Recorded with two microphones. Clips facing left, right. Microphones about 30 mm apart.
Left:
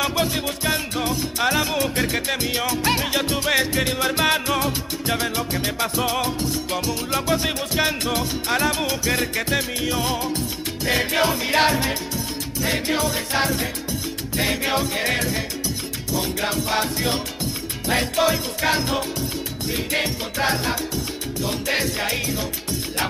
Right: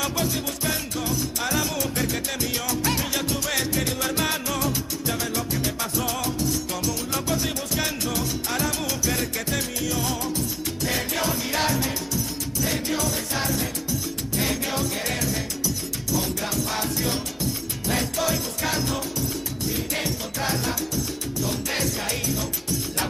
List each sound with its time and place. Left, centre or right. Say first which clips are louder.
0.0 s music: left 4 dB; left